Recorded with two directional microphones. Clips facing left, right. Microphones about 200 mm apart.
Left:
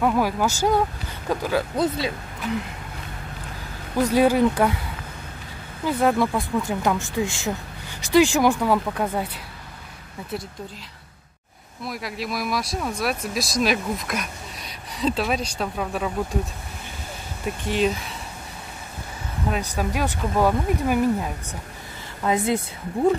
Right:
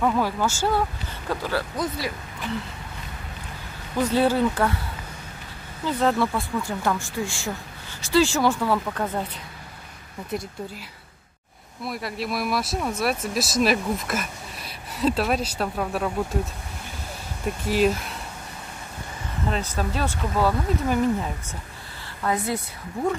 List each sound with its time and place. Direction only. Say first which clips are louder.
0.0 s speech: left 2 dB; 10° left (ahead or behind)
1.8 s a woman's voice: left 5 dB; 25° left (ahead or behind)
4.0 s speech: left 3 dB; 10° left (ahead or behind)
5.9 s speech: left 2 dB; 10° left (ahead or behind)
11.8 s speech: right 1 dB; centre (ahead or behind)
17.5 s speech: right 1 dB; 5° right (ahead or behind)
19.4 s speech: left 1 dB; 10° left (ahead or behind)
22.2 s a woman's voice: left 4 dB; 20° left (ahead or behind)